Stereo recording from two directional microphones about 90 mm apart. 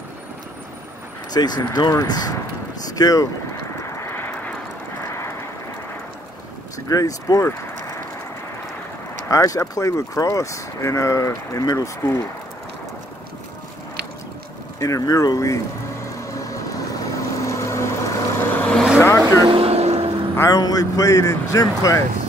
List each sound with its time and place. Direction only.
1.3 s speech: 50° left (ahead or behind)
3.9 s vehicle: 30° left (ahead or behind)
6.9 s speech: 40° left (ahead or behind)
9.3 s speech: 35° left (ahead or behind)
14.8 s speech: 40° left (ahead or behind)
16.2 s vehicle: 40° left (ahead or behind); by 18.8 s 20° left (ahead or behind)
18.9 s vehicle: 35° left (ahead or behind)
19.4 s vehicle: 90° right
20.3 s speech: 40° left (ahead or behind)